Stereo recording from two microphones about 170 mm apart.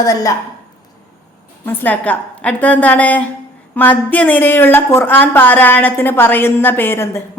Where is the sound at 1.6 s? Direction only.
10° left (ahead or behind).